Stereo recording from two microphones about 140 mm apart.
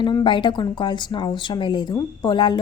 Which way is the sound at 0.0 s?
30° left (ahead or behind).